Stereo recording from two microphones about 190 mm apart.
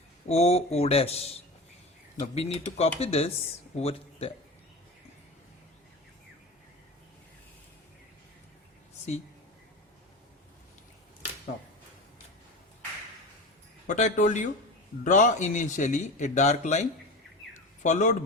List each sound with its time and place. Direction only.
0.3 s speech: 35° left (ahead or behind)
2.2 s speech: 35° left (ahead or behind)
13.8 s speech: 40° left (ahead or behind)
17.8 s speech: 40° left (ahead or behind)